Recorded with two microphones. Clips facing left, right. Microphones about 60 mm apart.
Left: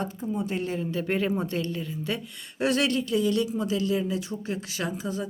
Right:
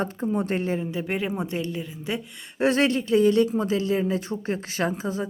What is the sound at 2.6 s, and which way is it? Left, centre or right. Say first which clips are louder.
Speech: right 3 dB; right.